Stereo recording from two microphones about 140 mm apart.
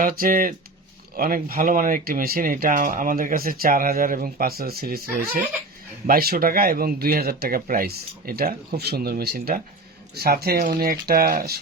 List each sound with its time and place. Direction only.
0.0 s speech: 90° right